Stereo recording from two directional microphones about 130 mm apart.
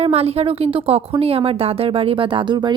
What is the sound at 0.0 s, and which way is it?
Speech, 50° right (ahead or behind).